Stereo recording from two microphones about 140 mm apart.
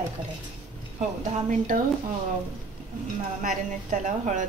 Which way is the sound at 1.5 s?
70° right (ahead or behind).